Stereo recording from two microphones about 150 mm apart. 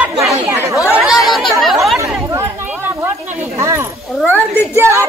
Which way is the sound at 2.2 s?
15° right (ahead or behind).